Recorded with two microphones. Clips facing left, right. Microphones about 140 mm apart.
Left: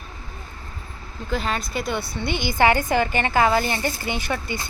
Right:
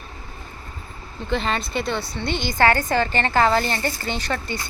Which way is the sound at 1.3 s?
5° left (ahead or behind).